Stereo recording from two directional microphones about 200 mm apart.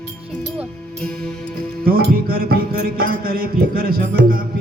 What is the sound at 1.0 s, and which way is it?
Music, 5° left (ahead or behind).